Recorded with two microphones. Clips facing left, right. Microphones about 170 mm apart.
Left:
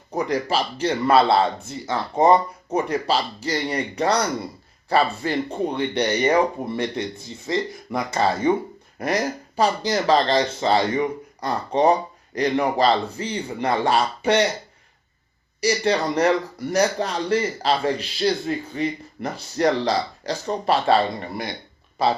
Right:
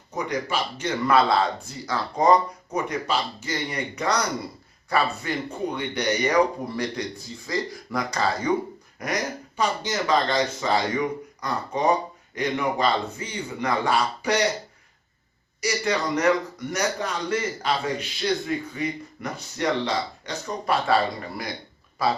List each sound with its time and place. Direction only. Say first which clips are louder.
0.1 s a man's voice: left 4 dB; 35° left (ahead or behind)
15.6 s a man's voice: left 4 dB; 30° left (ahead or behind)